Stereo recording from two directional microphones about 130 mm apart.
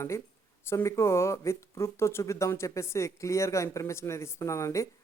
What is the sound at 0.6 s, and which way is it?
Speech, 20° left (ahead or behind).